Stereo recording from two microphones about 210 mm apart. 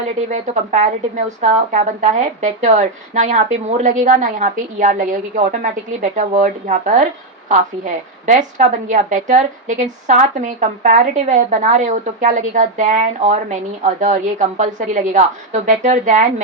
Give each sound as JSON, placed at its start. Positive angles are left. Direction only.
{"t": 0.3, "sound": "a woman's voice", "side_deg": -35}